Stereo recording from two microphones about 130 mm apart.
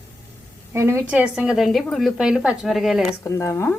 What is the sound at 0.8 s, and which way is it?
A woman's voice, 20° right (ahead or behind).